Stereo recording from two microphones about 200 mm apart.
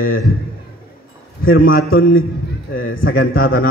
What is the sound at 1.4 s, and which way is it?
A man's voice, 45° left (ahead or behind).